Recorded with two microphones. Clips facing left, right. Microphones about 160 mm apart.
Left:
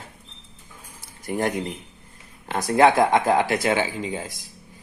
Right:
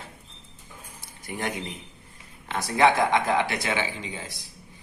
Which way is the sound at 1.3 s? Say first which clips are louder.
Left 7 dB; 50° left (ahead or behind).